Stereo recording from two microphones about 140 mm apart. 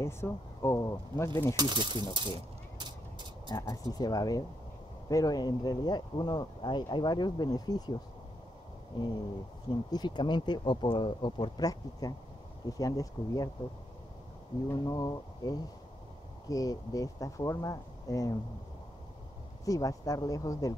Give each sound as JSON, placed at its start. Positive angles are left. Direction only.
{"t": 0.0, "sound": "speech", "side_deg": 20}
{"t": 1.6, "sound": "speech", "side_deg": -35}
{"t": 3.4, "sound": "speech", "side_deg": 25}
{"t": 9.7, "sound": "speech", "side_deg": 30}
{"t": 14.7, "sound": "speech", "side_deg": 25}
{"t": 19.6, "sound": "speech", "side_deg": 25}